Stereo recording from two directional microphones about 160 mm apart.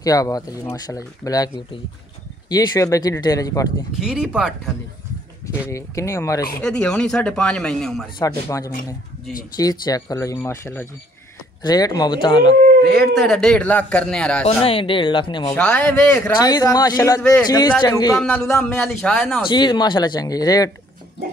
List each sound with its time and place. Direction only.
0.0 s speech: 20° left (ahead or behind)
4.0 s a man's voice: 5° right (ahead or behind)
5.7 s speech: 20° left (ahead or behind)
6.6 s a man's voice: 5° left (ahead or behind)
8.2 s speech: 20° left (ahead or behind)
11.6 s speech: 25° left (ahead or behind)
13.1 s a man's voice: centre (ahead or behind)
14.4 s speech: 35° left (ahead or behind)
15.5 s speech: 10° left (ahead or behind)
16.3 s speech: 25° left (ahead or behind)
18.7 s a man's voice: 5° left (ahead or behind)
19.5 s speech: 25° left (ahead or behind)